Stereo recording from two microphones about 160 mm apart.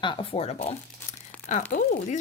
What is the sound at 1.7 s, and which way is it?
Speech, 55° left (ahead or behind).